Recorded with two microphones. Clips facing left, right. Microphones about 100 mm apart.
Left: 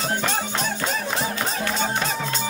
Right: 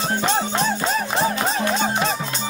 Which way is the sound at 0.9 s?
45° right (ahead or behind).